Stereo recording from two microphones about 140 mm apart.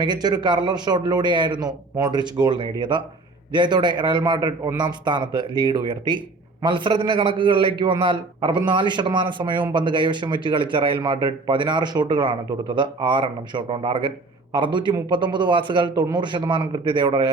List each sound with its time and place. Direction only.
0.0 s a man's voice: 30° right (ahead or behind)